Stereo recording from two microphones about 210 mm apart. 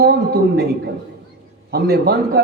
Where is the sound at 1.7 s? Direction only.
50° right (ahead or behind).